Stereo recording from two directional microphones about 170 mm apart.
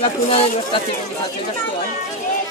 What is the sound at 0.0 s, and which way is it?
Speech, 35° left (ahead or behind).